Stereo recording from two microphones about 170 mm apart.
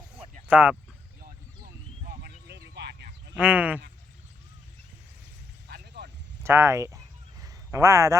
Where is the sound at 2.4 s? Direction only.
75° right (ahead or behind).